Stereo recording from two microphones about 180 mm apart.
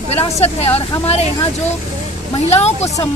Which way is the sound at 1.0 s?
35° left (ahead or behind).